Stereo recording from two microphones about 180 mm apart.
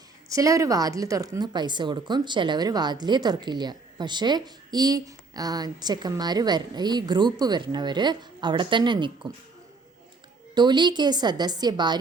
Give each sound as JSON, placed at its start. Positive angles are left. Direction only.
{"t": 0.3, "sound": "speech", "side_deg": -20}
{"t": 10.5, "sound": "speech", "side_deg": -25}